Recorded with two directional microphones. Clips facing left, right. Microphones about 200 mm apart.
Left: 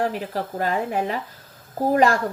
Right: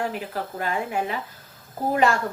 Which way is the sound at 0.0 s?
40° left (ahead or behind).